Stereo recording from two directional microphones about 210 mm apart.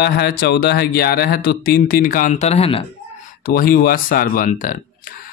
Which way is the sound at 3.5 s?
45° left (ahead or behind).